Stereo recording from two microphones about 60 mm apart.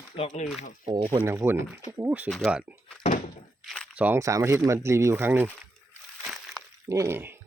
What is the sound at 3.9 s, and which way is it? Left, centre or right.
Speech, right.